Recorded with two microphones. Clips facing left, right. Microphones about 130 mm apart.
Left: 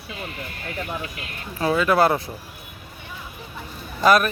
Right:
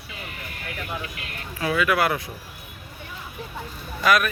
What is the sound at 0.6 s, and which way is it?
Speech, 30° left (ahead or behind).